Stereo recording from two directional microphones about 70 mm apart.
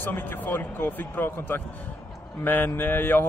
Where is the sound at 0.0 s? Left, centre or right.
Left.